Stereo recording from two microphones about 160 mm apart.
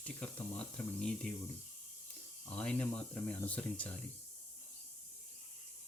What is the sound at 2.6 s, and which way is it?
Speech, 10° left (ahead or behind).